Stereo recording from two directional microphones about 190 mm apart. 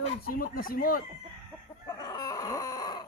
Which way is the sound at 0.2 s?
50° left (ahead or behind).